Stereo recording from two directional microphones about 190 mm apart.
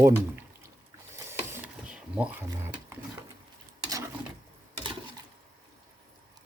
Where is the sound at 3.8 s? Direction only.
15° right (ahead or behind).